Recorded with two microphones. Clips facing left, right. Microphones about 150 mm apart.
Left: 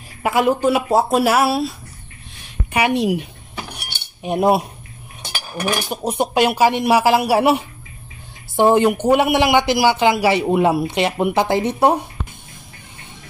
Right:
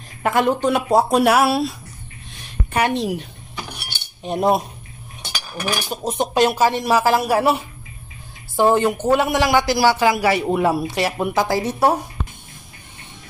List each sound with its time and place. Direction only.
0.2 s speech: 5° left (ahead or behind)
2.7 s speech: 10° left (ahead or behind)
5.9 s a man's voice: 10° left (ahead or behind)